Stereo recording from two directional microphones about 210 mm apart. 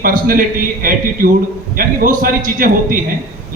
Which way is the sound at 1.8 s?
45° right (ahead or behind).